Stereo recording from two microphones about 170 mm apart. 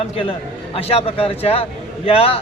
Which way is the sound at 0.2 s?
35° left (ahead or behind).